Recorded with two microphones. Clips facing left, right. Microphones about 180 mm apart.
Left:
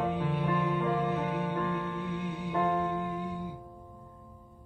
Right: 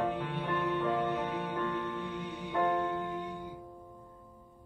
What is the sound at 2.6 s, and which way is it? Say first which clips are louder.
Music: even; 5° left (ahead or behind).